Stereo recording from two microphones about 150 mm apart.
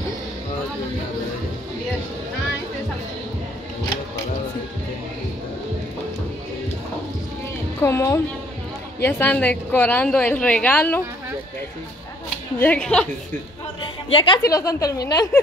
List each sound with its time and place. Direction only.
7.8 s a woman's voice: 20° left (ahead or behind)
12.5 s a woman's voice: 10° left (ahead or behind)
14.1 s a woman's voice: 35° left (ahead or behind)
14.4 s a woman's voice: 20° left (ahead or behind)